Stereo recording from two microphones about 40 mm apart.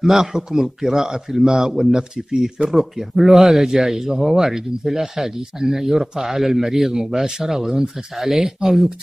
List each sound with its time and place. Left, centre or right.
0.0 s speech: centre
8.4 s speech: centre